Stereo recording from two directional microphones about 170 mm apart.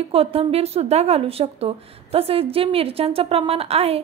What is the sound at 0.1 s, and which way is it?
A woman's voice, 35° right (ahead or behind).